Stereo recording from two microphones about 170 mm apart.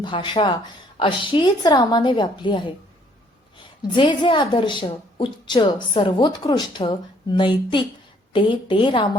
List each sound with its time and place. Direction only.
0.0 s a woman's voice: 30° left (ahead or behind)